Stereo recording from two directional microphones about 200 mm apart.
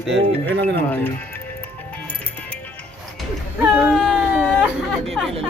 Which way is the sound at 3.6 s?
5° right (ahead or behind).